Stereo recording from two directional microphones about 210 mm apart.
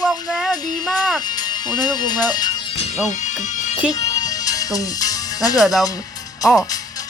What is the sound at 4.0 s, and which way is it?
Music, 15° left (ahead or behind).